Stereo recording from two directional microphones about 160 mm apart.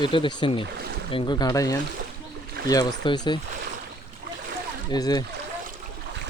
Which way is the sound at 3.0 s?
25° left (ahead or behind).